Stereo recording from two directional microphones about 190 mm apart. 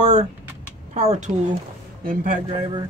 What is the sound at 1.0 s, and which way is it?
Speech, 40° right (ahead or behind).